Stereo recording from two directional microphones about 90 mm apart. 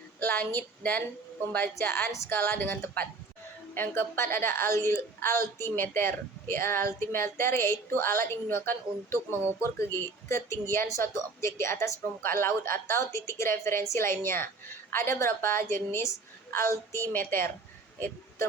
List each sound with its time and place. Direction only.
0.2 s a woman's voice: 20° left (ahead or behind)